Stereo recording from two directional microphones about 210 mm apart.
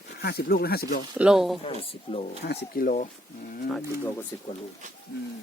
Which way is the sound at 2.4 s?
45° left (ahead or behind).